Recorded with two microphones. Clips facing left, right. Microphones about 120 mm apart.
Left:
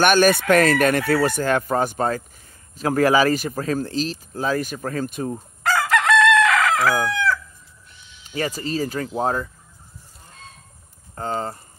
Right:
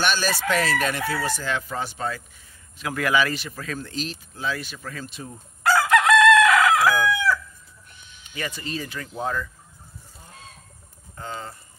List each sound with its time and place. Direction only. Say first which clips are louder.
0.0 s speech: left 8 dB; 55° left (ahead or behind)
5.9 s chicken: right 1 dB; 10° right (ahead or behind)
8.4 s speech: left 7 dB; 40° left (ahead or behind)
11.1 s speech: left 8 dB; 40° left (ahead or behind)